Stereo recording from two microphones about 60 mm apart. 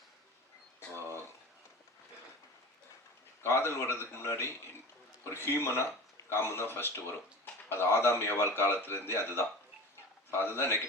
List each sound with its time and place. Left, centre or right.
3.4 s a man's voice: left